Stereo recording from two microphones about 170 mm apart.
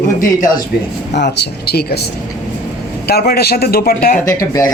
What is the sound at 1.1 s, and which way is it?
Speech, 80° left.